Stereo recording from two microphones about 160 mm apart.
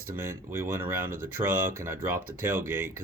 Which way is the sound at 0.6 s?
15° right (ahead or behind).